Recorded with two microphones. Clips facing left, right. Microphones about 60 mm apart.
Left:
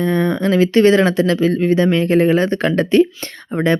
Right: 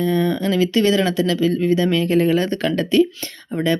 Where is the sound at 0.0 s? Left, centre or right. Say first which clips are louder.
Left 2 dB; left.